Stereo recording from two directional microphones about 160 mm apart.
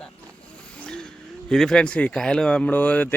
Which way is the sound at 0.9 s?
5° left (ahead or behind).